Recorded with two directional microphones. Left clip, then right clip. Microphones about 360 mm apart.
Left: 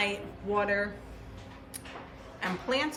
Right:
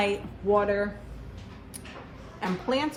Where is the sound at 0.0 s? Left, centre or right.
Centre.